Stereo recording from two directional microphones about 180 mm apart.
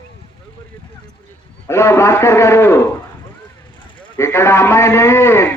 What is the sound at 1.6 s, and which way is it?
A man's voice, 15° left (ahead or behind).